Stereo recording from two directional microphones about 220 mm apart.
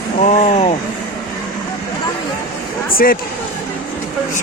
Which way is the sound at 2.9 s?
40° left (ahead or behind).